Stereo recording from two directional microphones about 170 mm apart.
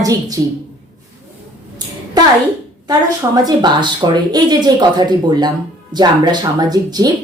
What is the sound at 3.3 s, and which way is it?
Speech, 25° right (ahead or behind).